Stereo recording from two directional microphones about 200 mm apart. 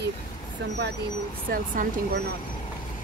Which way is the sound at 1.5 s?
40° right (ahead or behind).